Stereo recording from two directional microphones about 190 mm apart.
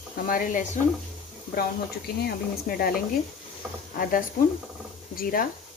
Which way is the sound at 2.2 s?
55° left (ahead or behind).